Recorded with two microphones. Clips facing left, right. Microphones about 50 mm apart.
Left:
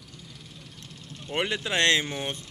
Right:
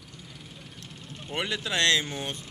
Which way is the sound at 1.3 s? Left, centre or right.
Centre.